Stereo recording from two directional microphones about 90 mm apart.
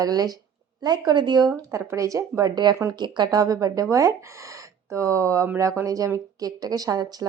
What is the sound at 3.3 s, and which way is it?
Speech, 40° right (ahead or behind).